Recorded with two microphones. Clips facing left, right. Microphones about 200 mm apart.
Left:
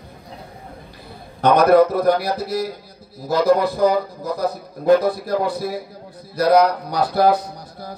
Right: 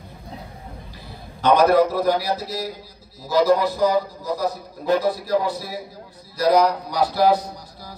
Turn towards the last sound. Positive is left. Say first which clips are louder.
# left 4 dB
turn(degrees=55)  # may be behind; listen again after turning